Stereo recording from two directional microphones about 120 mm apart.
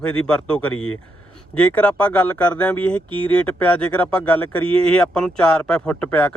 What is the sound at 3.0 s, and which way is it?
Speech, 45° right (ahead or behind).